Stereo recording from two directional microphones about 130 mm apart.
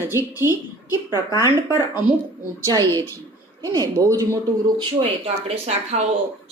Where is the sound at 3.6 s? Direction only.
25° right (ahead or behind).